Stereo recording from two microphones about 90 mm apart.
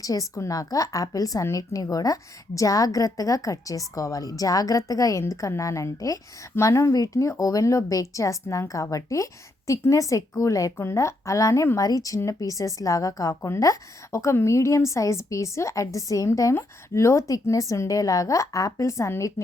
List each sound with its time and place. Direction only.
0.0 s speech: 40° left (ahead or behind)